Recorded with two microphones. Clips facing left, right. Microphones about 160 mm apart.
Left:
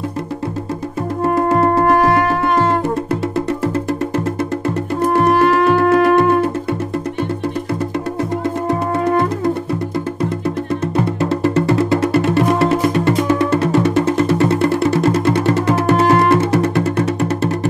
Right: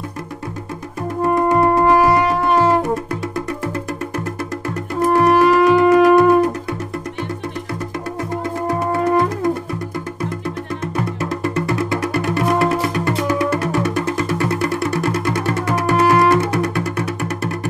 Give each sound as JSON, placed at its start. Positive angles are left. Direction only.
{"t": 1.9, "sound": "music", "side_deg": 0}
{"t": 5.0, "sound": "music", "side_deg": 0}
{"t": 11.0, "sound": "music", "side_deg": 30}